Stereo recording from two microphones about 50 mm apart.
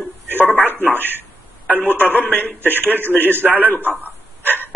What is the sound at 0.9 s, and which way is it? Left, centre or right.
A man's voice, right.